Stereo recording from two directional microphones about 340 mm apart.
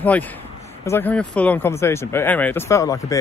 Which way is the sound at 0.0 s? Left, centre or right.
Centre.